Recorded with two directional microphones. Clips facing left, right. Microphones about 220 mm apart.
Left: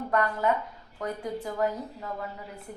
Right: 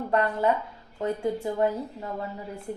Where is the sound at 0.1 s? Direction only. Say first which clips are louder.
Right 2 dB; 30° right (ahead or behind).